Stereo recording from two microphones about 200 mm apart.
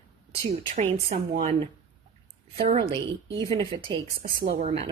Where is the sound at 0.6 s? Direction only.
35° right (ahead or behind).